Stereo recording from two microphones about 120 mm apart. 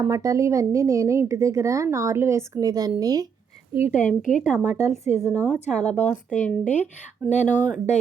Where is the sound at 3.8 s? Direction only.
75° left (ahead or behind).